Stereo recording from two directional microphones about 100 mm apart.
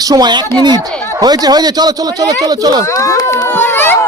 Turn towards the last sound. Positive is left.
turn(degrees=20)  # may be behind; listen again after turning